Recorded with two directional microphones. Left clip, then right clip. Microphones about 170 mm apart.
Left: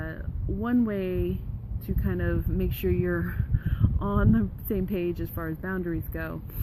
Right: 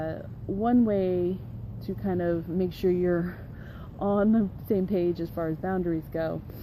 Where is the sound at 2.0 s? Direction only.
30° left (ahead or behind).